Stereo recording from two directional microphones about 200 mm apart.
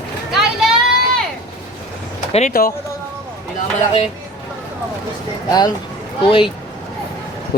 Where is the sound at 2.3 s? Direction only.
40° left (ahead or behind).